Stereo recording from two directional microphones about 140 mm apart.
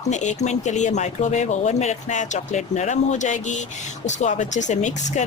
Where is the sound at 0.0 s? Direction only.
60° left (ahead or behind).